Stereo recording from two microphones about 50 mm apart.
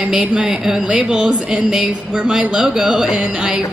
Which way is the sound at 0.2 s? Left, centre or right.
Centre.